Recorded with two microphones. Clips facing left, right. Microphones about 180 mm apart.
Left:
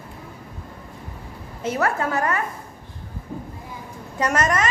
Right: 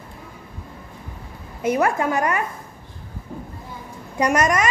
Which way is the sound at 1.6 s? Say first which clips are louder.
Right 3 dB; 15° right (ahead or behind).